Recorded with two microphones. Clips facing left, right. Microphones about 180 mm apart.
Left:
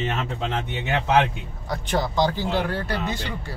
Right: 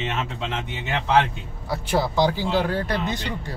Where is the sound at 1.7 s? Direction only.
10° right (ahead or behind).